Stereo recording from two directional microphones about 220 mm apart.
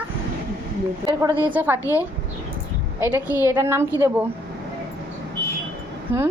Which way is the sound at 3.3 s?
10° right (ahead or behind).